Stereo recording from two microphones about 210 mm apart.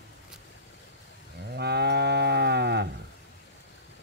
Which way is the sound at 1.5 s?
50° right (ahead or behind).